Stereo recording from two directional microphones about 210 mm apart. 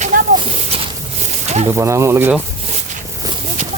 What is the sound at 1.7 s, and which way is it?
Speech, 15° right (ahead or behind).